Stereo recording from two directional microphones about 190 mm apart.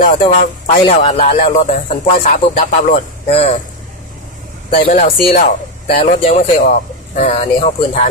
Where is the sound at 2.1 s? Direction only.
45° left (ahead or behind).